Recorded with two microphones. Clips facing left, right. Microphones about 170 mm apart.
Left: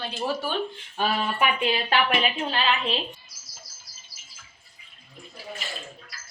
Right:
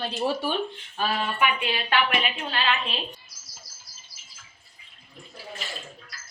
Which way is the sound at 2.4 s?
25° left (ahead or behind).